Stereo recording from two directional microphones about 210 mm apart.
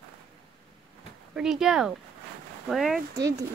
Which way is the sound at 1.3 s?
5° right (ahead or behind).